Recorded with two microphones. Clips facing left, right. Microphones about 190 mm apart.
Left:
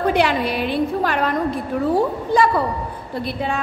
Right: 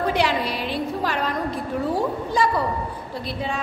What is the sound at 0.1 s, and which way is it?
A woman's voice, 55° left (ahead or behind).